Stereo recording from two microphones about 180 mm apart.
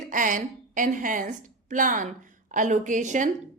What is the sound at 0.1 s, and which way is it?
A woman's voice, 45° right (ahead or behind).